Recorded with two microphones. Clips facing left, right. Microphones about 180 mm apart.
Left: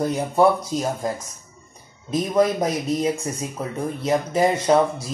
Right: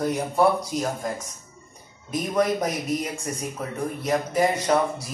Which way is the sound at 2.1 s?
25° left (ahead or behind).